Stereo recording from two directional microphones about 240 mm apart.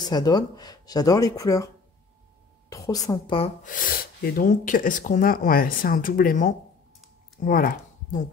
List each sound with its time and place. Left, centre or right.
0.1 s speech: centre
2.7 s speech: centre
3.6 s speech: left
7.3 s a sound: left